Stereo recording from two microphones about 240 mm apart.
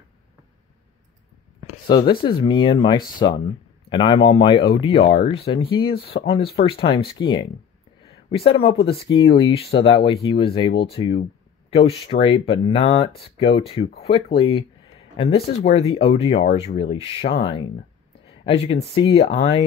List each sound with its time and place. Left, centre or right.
1.7 s speech: centre